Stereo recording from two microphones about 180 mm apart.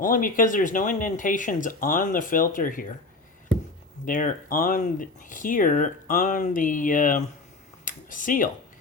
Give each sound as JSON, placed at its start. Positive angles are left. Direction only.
{"t": 0.0, "sound": "speech", "side_deg": 50}
{"t": 4.0, "sound": "speech", "side_deg": 50}